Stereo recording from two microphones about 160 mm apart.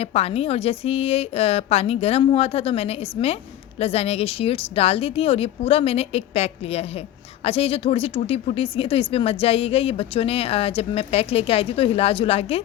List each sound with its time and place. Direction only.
0.0 s speech: 40° left (ahead or behind)